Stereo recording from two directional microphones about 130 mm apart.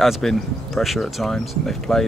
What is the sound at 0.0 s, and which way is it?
Speech, centre (ahead or behind).